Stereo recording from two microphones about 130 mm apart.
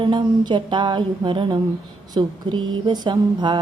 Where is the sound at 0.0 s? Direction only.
35° right (ahead or behind).